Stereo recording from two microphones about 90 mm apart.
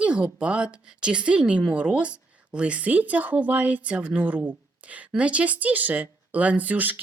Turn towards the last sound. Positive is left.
turn(degrees=-20)  # may be behind; listen again after turning